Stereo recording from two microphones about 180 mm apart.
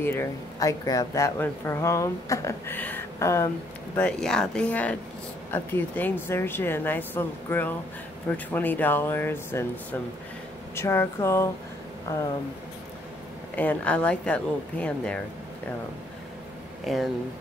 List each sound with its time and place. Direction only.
0.0 s speech: 15° left (ahead or behind)
10.7 s speech: 15° left (ahead or behind)
13.6 s speech: 10° left (ahead or behind)
16.8 s speech: centre (ahead or behind)